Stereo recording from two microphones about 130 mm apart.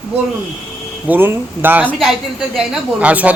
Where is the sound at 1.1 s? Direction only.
15° right (ahead or behind).